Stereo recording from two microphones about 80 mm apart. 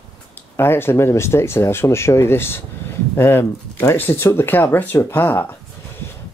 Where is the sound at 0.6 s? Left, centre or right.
Left.